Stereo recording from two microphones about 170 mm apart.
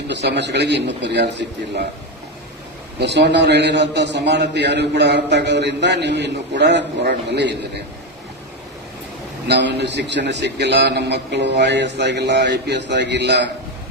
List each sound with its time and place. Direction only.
0.1 s a man's voice: 90° right
3.0 s a man's voice: 80° right
9.5 s a man's voice: 80° right